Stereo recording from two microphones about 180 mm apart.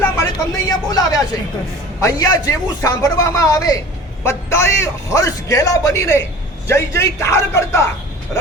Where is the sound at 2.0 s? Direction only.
20° left (ahead or behind).